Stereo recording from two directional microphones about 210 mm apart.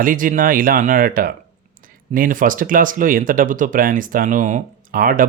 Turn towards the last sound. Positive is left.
turn(degrees=-40)  # may be behind; listen again after turning